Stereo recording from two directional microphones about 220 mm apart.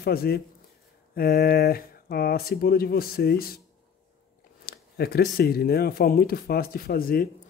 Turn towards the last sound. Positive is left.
turn(degrees=40)  # may be behind; listen again after turning